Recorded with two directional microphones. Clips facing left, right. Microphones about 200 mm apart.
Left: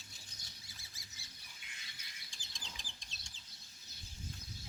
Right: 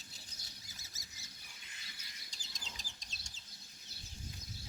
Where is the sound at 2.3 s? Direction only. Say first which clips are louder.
Right 1 dB; 40° right (ahead or behind).